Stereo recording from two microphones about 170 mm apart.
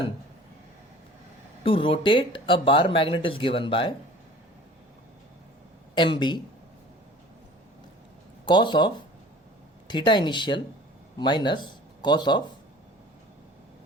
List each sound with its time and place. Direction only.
1.6 s speech: 30° left (ahead or behind)
5.9 s speech: 25° left (ahead or behind)
8.4 s speech: 25° left (ahead or behind)